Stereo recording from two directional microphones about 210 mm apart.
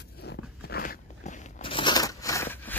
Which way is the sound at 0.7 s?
50° left (ahead or behind).